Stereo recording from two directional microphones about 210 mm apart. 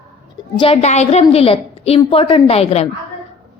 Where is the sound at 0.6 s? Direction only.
30° left (ahead or behind).